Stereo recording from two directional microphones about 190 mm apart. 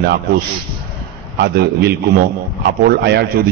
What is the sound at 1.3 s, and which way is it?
A man's voice, 60° right (ahead or behind).